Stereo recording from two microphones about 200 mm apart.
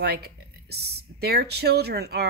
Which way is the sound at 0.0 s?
55° right (ahead or behind).